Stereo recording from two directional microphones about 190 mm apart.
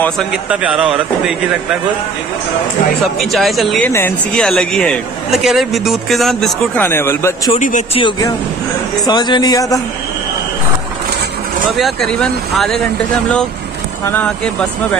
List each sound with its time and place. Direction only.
0.5 s a man's voice: 5° right (ahead or behind)
3.2 s a man's voice: centre (ahead or behind)
7.5 s a man's voice: 40° left (ahead or behind)
9.0 s speech: 25° left (ahead or behind)
11.7 s a man's voice: centre (ahead or behind)
14.0 s speech: 5° left (ahead or behind)